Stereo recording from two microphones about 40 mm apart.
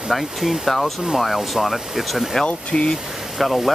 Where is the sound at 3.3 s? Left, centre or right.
Centre.